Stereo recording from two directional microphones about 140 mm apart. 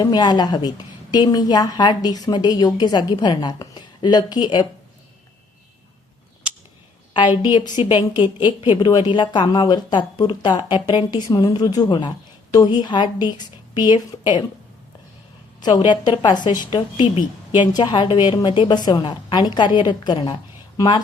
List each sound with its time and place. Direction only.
0.0 s a woman's voice: 30° left (ahead or behind)
7.1 s a woman's voice: 35° left (ahead or behind)
15.6 s a woman's voice: 30° left (ahead or behind)